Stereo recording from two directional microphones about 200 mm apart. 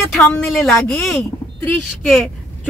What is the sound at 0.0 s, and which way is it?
Speech, 5° left (ahead or behind).